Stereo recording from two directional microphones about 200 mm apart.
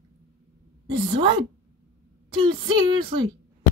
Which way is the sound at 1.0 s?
30° right (ahead or behind).